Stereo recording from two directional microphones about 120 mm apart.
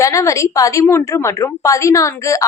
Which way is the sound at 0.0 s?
25° left (ahead or behind).